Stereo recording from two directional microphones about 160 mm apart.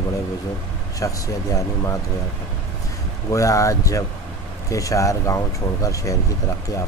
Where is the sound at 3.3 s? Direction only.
20° left (ahead or behind).